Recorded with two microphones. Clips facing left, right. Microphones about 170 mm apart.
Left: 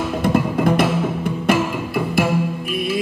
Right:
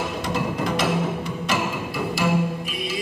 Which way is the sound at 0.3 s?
55° left (ahead or behind).